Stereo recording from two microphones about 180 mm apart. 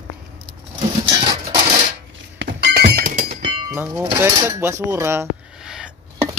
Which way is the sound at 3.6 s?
20° right (ahead or behind).